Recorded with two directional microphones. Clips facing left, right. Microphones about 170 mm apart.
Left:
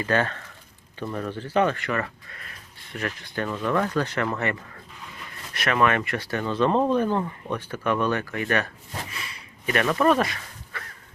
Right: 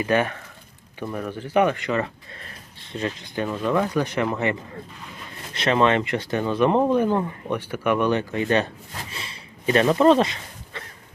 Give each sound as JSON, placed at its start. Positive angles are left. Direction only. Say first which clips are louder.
{"t": 0.0, "sound": "speech", "louder": "right 3 dB", "side_deg": -15}
{"t": 5.5, "sound": "speech", "louder": "right 3 dB", "side_deg": -25}